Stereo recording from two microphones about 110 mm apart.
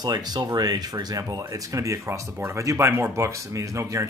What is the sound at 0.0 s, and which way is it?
Speech, 40° right (ahead or behind).